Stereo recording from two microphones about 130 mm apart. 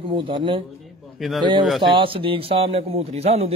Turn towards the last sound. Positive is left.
turn(degrees=-50)  # may be behind; listen again after turning